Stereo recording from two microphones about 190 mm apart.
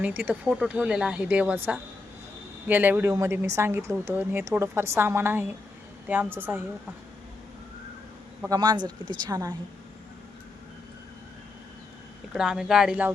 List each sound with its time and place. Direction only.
0.0 s speech: 10° right (ahead or behind)
8.4 s speech: 20° right (ahead or behind)
12.3 s speech: 5° right (ahead or behind)